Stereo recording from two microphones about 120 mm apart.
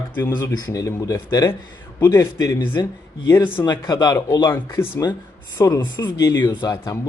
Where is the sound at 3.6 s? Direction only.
40° left (ahead or behind); by 4.9 s 20° left (ahead or behind).